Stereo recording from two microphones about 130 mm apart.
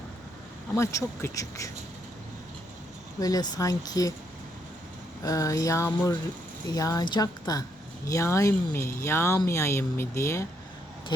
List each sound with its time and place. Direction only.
0.8 s speech: 25° left (ahead or behind)
3.2 s speech: 30° left (ahead or behind)
5.2 s speech: 25° left (ahead or behind)